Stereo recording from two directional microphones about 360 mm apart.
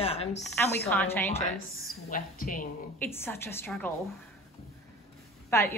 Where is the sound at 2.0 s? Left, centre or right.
Left.